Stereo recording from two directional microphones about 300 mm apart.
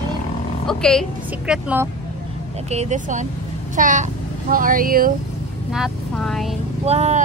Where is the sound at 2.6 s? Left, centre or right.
Right.